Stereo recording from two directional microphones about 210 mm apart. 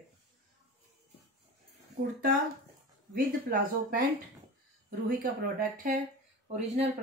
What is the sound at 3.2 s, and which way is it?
Speech, 45° right (ahead or behind).